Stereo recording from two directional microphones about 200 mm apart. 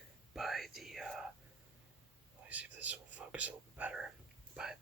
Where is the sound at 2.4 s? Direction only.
5° right (ahead or behind).